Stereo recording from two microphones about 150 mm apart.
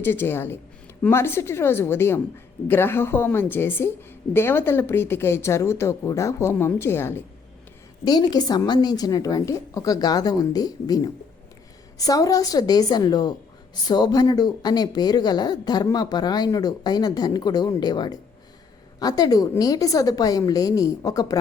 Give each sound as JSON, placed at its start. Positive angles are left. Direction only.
{"t": 0.0, "sound": "speech", "side_deg": 15}
{"t": 8.0, "sound": "speech", "side_deg": 25}